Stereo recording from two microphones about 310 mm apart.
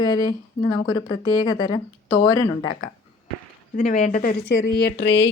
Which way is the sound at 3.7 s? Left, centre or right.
Left.